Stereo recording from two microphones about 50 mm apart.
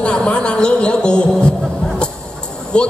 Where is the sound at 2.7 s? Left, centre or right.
Centre.